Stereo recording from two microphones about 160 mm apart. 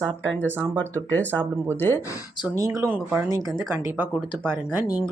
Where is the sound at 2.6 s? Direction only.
20° right (ahead or behind).